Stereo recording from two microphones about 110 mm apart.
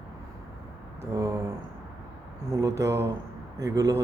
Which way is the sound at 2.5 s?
30° right (ahead or behind).